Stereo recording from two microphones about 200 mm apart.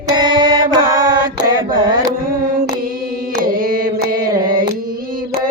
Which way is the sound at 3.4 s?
45° right (ahead or behind).